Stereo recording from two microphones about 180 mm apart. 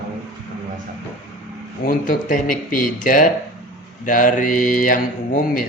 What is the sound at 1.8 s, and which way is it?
Speech, 50° left (ahead or behind).